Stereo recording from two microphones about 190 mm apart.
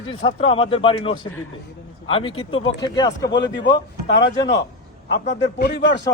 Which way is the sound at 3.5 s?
65° left (ahead or behind).